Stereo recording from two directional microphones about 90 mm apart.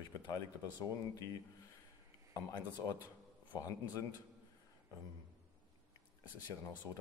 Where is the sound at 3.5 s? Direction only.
40° left (ahead or behind).